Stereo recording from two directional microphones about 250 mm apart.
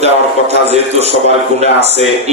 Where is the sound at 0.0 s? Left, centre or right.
Right.